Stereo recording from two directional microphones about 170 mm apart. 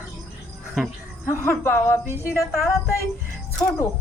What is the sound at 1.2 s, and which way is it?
Speech, 15° left (ahead or behind).